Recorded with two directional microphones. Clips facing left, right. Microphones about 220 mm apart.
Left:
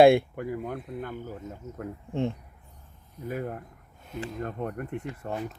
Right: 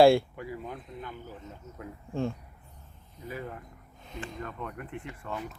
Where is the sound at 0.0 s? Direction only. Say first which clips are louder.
Left 2 dB; 20° left (ahead or behind).